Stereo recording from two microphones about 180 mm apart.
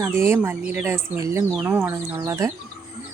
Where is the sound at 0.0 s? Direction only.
15° right (ahead or behind).